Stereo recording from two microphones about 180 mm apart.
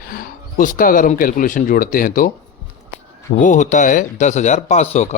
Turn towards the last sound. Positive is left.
turn(degrees=35)  # may be behind; listen again after turning